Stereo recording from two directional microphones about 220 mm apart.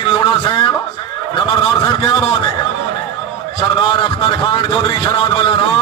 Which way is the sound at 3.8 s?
25° left (ahead or behind).